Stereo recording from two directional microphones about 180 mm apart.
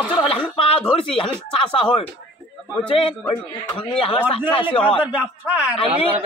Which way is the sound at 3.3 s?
30° left (ahead or behind).